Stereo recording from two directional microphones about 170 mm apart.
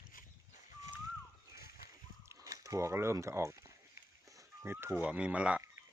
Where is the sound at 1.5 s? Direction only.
65° left (ahead or behind).